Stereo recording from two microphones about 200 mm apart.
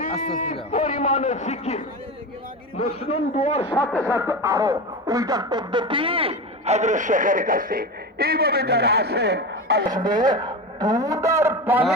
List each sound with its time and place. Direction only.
0.0 s a man's voice: 40° left (ahead or behind)
4.0 s speech: 10° right (ahead or behind); by 9.8 s 55° right (ahead or behind)
9.8 s speech: 20° right (ahead or behind)